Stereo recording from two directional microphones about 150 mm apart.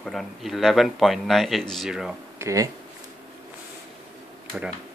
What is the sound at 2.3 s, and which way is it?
Speech, 20° right (ahead or behind).